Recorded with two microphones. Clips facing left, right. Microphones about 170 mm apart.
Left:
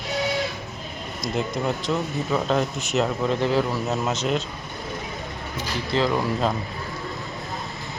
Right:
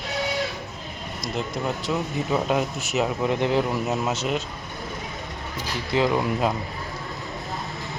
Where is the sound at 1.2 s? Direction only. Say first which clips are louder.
Left 3 dB; centre (ahead or behind).